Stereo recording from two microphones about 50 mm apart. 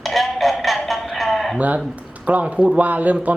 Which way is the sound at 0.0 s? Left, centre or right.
Centre.